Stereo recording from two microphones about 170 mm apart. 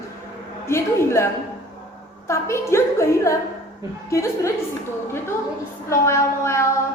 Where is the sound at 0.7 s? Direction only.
15° left (ahead or behind).